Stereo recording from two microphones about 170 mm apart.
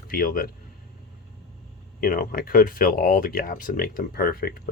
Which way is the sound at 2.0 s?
60° left (ahead or behind).